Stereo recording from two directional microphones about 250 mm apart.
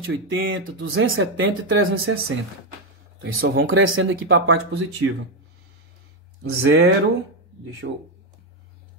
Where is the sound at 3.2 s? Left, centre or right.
Right.